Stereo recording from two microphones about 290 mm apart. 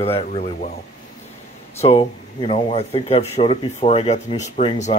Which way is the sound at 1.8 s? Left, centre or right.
Centre.